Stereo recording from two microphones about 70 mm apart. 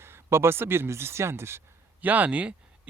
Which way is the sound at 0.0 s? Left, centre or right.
Right.